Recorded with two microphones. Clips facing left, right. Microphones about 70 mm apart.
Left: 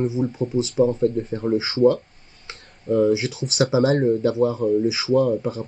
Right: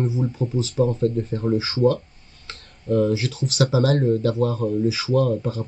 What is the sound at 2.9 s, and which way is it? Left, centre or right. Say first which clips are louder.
Speech: left 2 dB; centre.